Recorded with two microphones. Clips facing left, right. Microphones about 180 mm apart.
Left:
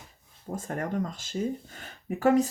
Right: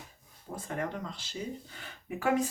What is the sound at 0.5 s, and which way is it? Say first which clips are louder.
Speech: left 5 dB; 45° left (ahead or behind).